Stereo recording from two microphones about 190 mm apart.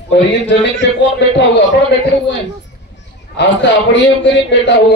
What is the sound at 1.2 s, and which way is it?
Speech, 65° left (ahead or behind).